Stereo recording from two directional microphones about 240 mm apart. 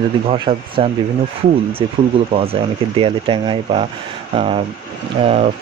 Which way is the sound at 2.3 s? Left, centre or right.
Right.